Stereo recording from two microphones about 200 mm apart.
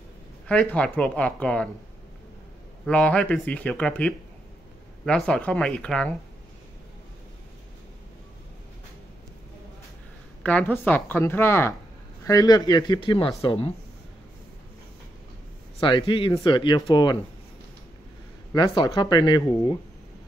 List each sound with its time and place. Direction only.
0.5 s speech: 5° left (ahead or behind)
2.8 s speech: 5° left (ahead or behind)
10.4 s speech: 5° left (ahead or behind); by 13.7 s 30° left (ahead or behind)
15.8 s speech: 25° left (ahead or behind)
18.5 s speech: 20° left (ahead or behind)